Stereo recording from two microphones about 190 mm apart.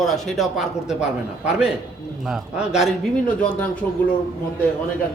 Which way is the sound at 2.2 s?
Centre (ahead or behind).